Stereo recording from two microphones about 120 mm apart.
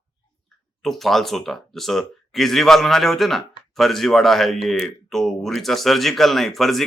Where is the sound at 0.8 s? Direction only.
Centre (ahead or behind).